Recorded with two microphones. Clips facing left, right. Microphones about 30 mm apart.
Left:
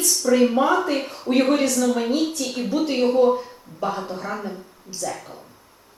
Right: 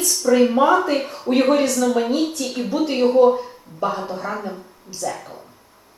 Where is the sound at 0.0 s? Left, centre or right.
Centre.